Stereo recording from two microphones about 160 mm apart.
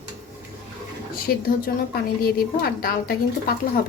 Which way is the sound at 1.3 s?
65° left (ahead or behind).